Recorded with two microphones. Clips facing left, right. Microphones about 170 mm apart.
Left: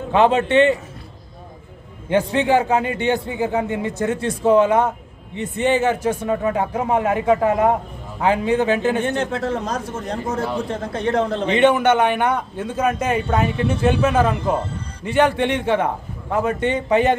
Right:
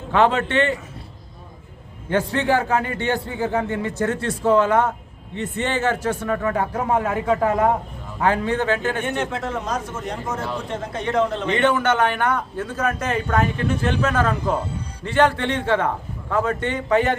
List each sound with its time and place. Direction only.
0.1 s a man's voice: 20° left (ahead or behind)
2.0 s a man's voice: 15° left (ahead or behind)
9.0 s a man's voice: 35° left (ahead or behind)
11.5 s a man's voice: 15° left (ahead or behind)